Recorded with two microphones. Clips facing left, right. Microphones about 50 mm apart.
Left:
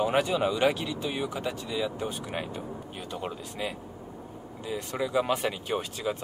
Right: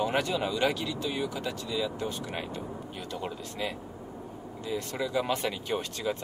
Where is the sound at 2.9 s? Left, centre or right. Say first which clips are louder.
Left 1 dB; centre.